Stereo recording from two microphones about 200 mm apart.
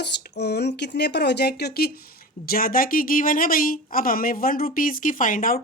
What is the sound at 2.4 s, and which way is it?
Speech, 45° left (ahead or behind).